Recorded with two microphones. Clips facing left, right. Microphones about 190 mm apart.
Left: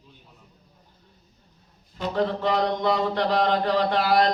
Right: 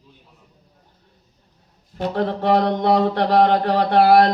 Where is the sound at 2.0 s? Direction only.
60° right (ahead or behind).